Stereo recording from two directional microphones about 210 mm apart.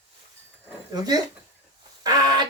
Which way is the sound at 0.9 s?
20° right (ahead or behind).